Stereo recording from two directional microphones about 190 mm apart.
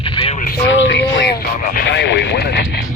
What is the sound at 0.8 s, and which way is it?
Speech, 55° left (ahead or behind).